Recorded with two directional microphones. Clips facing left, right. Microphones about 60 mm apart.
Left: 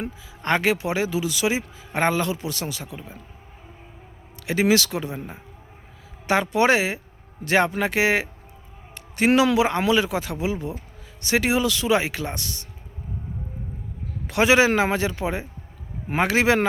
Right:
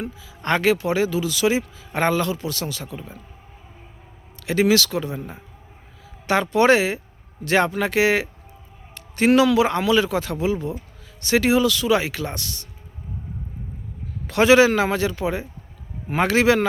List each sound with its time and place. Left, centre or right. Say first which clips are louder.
0.4 s speech: right 2 dB; centre
4.4 s speech: right 2 dB; centre
9.0 s a sound: right 2 dB; centre
9.6 s speech: right 2 dB; centre
14.3 s speech: right 3 dB; centre